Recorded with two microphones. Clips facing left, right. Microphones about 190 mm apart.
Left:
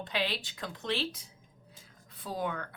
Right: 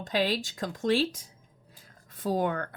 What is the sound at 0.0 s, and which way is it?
Speech, 45° right (ahead or behind).